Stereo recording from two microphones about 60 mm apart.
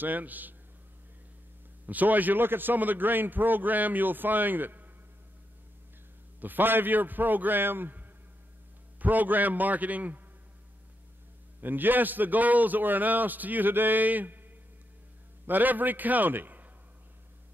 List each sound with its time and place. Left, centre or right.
0.0 s a man's voice: right
1.9 s a man's voice: right
6.4 s a man's voice: right
9.0 s a man's voice: right
11.6 s a man's voice: right
15.4 s a man's voice: right